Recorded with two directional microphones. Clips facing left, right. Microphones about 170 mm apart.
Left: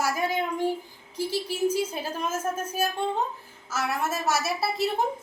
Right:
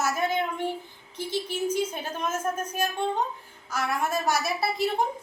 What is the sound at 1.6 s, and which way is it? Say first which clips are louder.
A woman's voice: left 2 dB; 10° left (ahead or behind).